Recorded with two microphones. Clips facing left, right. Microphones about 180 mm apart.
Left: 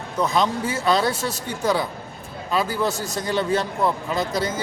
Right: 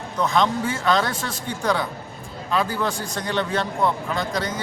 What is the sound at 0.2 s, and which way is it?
Speech, 5° left (ahead or behind).